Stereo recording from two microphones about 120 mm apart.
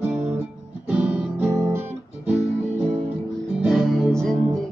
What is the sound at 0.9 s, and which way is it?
Guitar, 10° right (ahead or behind).